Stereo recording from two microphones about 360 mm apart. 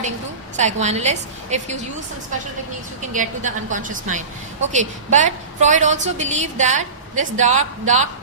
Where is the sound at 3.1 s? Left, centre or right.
Right.